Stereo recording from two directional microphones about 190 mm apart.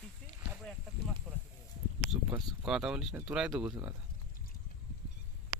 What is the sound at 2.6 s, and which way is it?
Speech, 5° right (ahead or behind).